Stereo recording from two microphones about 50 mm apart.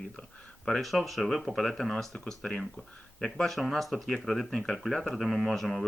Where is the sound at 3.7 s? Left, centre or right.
Centre.